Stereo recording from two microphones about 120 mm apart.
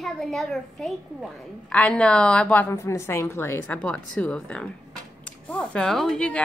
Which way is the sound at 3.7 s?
5° left (ahead or behind).